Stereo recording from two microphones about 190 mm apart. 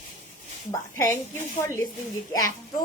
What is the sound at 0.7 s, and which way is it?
Speech, 15° left (ahead or behind).